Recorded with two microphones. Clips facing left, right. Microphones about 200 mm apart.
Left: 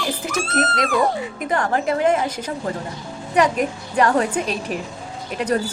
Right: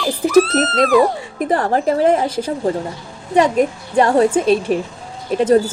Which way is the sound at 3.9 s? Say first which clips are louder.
Right 5 dB; 30° right (ahead or behind).